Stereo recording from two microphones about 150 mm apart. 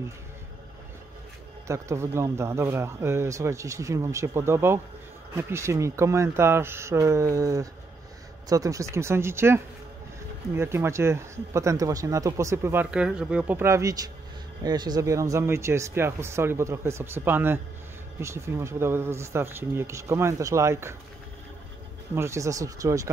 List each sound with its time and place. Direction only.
1.7 s speech: 20° right (ahead or behind)
12.9 s speech: 5° right (ahead or behind)
22.1 s speech: 20° right (ahead or behind)